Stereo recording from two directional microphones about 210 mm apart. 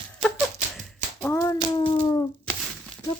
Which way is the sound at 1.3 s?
20° left (ahead or behind).